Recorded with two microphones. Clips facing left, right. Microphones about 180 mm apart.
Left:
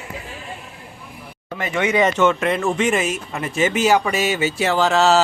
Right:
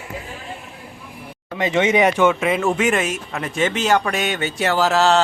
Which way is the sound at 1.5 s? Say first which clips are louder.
Right 2 dB; 20° right (ahead or behind).